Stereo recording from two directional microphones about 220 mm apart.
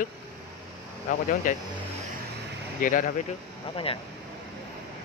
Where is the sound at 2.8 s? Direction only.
35° left (ahead or behind).